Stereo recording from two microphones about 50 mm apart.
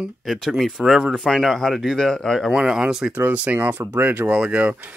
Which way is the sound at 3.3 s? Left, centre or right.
Right.